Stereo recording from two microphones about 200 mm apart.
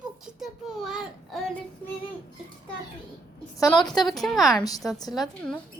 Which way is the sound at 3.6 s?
20° left (ahead or behind).